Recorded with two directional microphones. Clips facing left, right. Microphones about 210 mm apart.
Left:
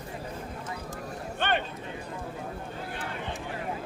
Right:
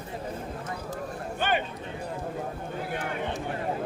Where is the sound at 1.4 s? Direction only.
5° right (ahead or behind).